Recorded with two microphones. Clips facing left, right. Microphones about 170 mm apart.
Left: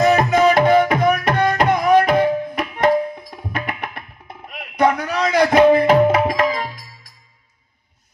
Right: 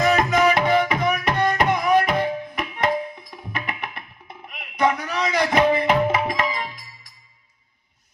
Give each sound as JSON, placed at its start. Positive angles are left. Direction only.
{"t": 0.0, "sound": "music", "side_deg": 30}
{"t": 0.6, "sound": "music", "side_deg": 45}
{"t": 5.4, "sound": "tabla", "side_deg": 35}